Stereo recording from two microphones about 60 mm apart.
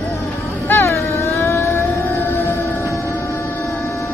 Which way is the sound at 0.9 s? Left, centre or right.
Left.